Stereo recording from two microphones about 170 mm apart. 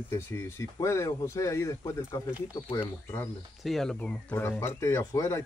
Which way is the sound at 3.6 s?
Centre (ahead or behind).